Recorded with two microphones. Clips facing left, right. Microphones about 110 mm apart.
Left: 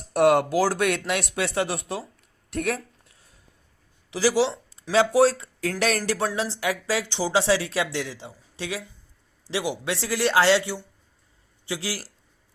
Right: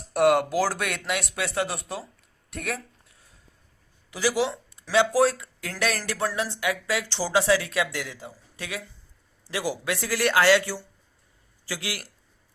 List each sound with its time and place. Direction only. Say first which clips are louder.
0.1 s speech: left 2 dB; 30° left (ahead or behind)
4.1 s speech: left 3 dB; 30° left (ahead or behind)
7.1 s speech: even; 20° left (ahead or behind)